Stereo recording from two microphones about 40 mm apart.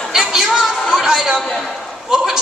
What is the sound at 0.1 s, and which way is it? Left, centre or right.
Chatter, centre.